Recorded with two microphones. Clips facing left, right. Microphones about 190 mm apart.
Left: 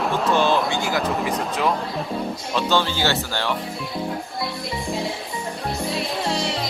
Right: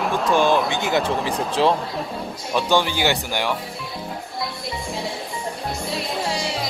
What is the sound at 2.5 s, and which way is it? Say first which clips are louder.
Speech: right 2 dB; 15° right (ahead or behind).